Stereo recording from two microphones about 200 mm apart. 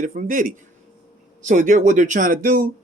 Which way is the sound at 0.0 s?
40° right (ahead or behind).